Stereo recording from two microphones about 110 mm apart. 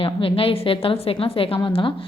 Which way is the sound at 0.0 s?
55° left (ahead or behind).